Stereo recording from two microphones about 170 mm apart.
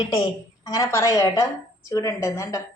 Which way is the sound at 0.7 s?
20° left (ahead or behind).